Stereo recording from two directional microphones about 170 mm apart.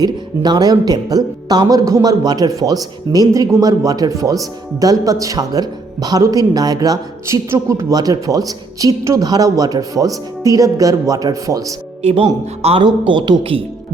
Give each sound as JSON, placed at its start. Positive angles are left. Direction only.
{"t": 0.0, "sound": "speech", "side_deg": -25}
{"t": 12.0, "sound": "a man's voice", "side_deg": -35}